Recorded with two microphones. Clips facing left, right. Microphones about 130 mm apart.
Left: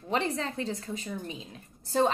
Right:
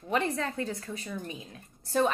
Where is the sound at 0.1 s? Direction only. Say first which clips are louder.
Even; 25° left (ahead or behind).